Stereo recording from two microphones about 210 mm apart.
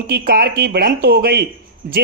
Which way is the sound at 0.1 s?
50° right (ahead or behind).